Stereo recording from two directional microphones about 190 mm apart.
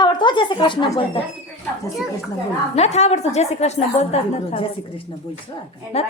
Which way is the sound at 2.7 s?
35° left (ahead or behind).